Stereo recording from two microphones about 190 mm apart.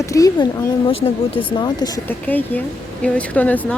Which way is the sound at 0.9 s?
30° left (ahead or behind).